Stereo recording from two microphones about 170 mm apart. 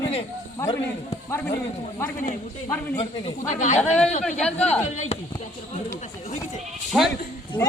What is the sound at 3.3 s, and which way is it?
Speech, 45° left (ahead or behind).